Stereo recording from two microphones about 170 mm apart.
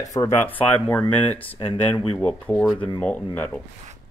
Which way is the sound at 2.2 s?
10° left (ahead or behind).